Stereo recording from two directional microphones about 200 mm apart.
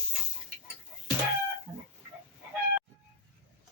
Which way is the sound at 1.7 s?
20° right (ahead or behind).